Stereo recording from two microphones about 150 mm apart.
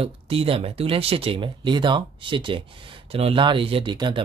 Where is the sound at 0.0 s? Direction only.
40° right (ahead or behind).